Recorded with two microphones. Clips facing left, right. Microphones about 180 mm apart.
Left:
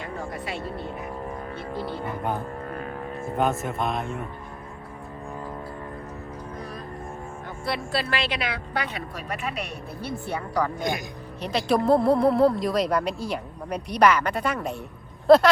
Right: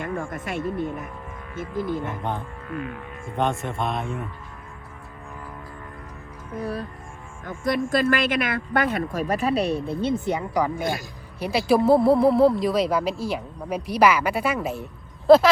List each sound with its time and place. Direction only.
0.0 s music: 50° right (ahead or behind)
1.5 s music: 45° right (ahead or behind)
2.4 s music: 40° left (ahead or behind)
3.3 s speech: 5° left (ahead or behind)
6.6 s music: 30° right (ahead or behind)
7.4 s a woman's voice: 45° right (ahead or behind); by 15.4 s centre (ahead or behind)